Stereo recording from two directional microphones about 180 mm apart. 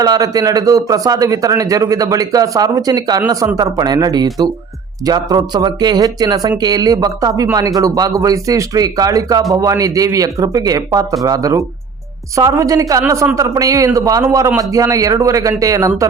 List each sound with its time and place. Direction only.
0.0 s a man's voice: 20° right (ahead or behind)